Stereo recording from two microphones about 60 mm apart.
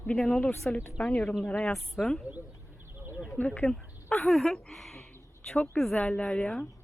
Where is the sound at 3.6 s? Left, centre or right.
Centre.